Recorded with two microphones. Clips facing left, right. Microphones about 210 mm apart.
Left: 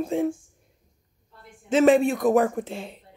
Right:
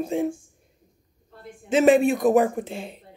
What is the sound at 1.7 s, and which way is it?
Speech, 5° right (ahead or behind).